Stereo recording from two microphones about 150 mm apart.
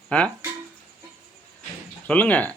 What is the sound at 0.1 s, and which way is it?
Speech, 10° left (ahead or behind).